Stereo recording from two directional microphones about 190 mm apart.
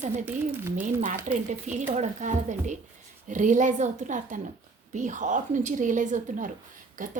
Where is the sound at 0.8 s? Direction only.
45° right (ahead or behind).